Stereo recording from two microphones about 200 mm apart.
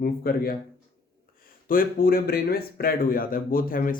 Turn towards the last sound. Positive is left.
turn(degrees=45)  # may be behind; listen again after turning